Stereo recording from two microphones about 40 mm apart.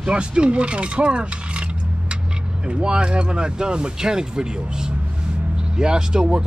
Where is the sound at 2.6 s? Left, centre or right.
Right.